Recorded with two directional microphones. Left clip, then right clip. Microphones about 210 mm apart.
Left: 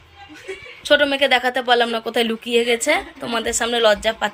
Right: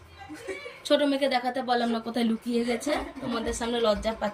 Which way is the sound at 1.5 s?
25° left (ahead or behind).